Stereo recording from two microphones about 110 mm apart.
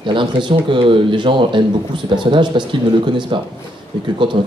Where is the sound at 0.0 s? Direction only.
50° right (ahead or behind).